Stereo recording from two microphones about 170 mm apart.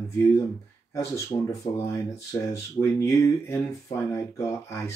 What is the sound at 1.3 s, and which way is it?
Speech, 15° left (ahead or behind).